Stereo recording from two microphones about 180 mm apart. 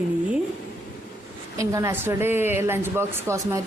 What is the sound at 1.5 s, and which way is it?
A woman's voice, 15° right (ahead or behind).